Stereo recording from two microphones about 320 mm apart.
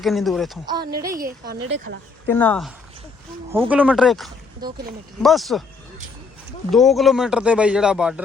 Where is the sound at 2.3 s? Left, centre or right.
Centre.